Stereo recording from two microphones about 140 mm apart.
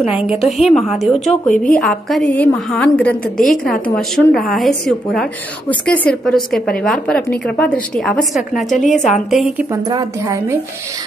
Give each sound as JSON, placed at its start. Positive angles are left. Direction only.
{"t": 0.5, "sound": "a woman's voice", "side_deg": 0}
{"t": 8.8, "sound": "a woman's voice", "side_deg": 60}
{"t": 9.1, "sound": "a woman's voice", "side_deg": 0}
{"t": 9.7, "sound": "a woman's voice", "side_deg": -25}